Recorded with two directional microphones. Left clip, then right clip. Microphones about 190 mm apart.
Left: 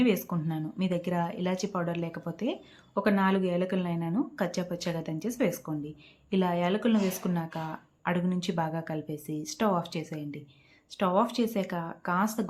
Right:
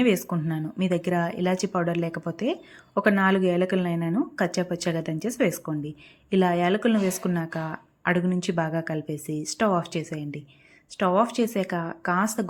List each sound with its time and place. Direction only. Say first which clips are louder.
0.0 s speech: right 4 dB; 25° right (ahead or behind)